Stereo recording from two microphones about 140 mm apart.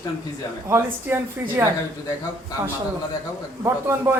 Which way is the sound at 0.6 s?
20° right (ahead or behind).